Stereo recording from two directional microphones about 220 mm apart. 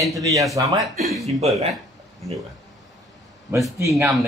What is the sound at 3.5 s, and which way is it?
Speech, 10° right (ahead or behind).